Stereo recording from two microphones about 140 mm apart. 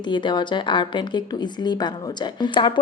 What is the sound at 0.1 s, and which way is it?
A woman's voice, 35° left (ahead or behind).